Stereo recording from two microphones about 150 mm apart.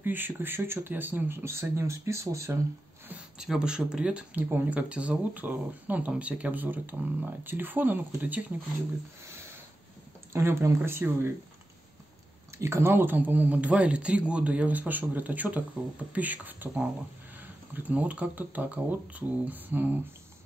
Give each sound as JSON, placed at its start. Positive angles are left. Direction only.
{"t": 0.0, "sound": "speech", "side_deg": -15}
{"t": 3.1, "sound": "speech", "side_deg": -5}
{"t": 10.3, "sound": "speech", "side_deg": -15}
{"t": 12.5, "sound": "speech", "side_deg": -20}